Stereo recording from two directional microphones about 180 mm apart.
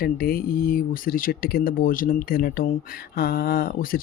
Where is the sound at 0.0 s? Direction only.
55° left (ahead or behind).